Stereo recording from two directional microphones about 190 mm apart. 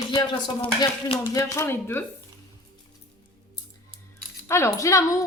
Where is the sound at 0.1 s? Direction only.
25° left (ahead or behind).